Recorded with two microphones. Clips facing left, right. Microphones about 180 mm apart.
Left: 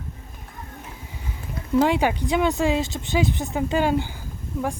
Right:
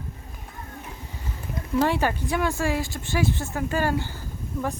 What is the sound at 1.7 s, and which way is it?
A woman's voice, 15° left (ahead or behind).